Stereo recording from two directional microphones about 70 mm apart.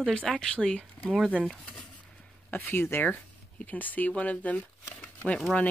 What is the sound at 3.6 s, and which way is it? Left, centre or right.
Speech, left.